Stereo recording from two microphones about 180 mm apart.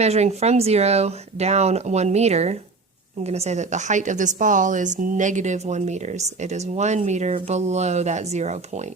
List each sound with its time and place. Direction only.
0.0 s a woman's voice: 35° right (ahead or behind)